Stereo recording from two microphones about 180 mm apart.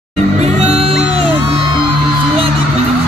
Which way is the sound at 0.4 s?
35° right (ahead or behind).